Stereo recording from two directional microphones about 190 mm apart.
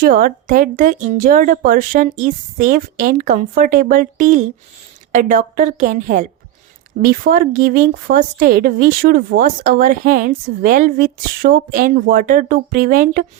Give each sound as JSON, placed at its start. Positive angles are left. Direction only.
{"t": 0.0, "sound": "speech", "side_deg": -50}